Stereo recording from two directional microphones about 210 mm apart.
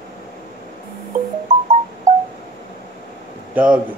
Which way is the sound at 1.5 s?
35° right (ahead or behind).